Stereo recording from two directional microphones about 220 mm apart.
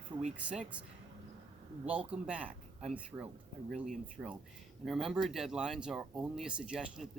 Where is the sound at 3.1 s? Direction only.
15° right (ahead or behind).